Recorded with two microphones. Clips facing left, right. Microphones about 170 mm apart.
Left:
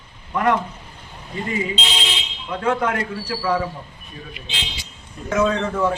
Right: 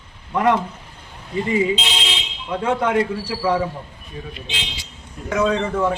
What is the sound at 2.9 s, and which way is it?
Speech, 10° right (ahead or behind).